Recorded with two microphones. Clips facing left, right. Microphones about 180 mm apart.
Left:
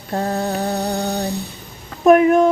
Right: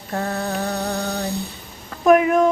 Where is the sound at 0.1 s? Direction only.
30° left (ahead or behind).